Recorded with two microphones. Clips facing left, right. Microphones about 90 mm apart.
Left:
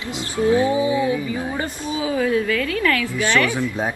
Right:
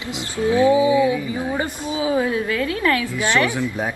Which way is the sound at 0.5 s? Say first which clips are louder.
Right 7 dB; 30° left (ahead or behind).